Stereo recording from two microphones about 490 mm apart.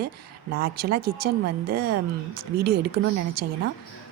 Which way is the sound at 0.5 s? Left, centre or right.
Centre.